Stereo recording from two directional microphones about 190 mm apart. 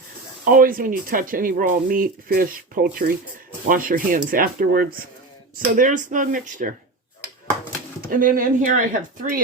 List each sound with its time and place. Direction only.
0.4 s speech: 45° right (ahead or behind)
8.0 s speech: 50° right (ahead or behind)